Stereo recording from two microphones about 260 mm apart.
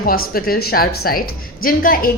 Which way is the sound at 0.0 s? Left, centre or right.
Left.